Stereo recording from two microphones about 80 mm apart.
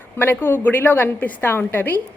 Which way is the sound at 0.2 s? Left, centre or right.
Left.